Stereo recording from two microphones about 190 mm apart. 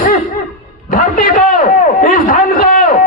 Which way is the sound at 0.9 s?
45° left (ahead or behind).